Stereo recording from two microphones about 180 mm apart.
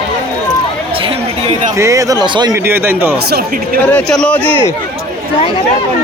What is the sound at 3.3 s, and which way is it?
Speech, 60° right (ahead or behind).